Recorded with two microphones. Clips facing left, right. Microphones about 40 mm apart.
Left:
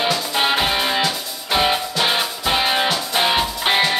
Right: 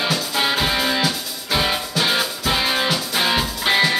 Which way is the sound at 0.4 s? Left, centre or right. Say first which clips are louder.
Left 1 dB; left.